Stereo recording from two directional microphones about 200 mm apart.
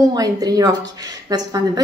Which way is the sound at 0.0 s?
20° right (ahead or behind).